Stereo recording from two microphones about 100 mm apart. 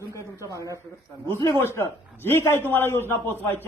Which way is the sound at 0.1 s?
30° left (ahead or behind).